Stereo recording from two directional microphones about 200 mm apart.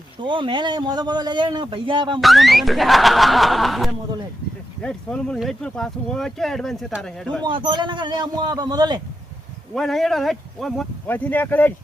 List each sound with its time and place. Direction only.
0.2 s a man's voice: 25° right (ahead or behind)
2.2 s speech: centre (ahead or behind)
7.4 s a man's voice: 25° right (ahead or behind)
9.7 s speech: centre (ahead or behind)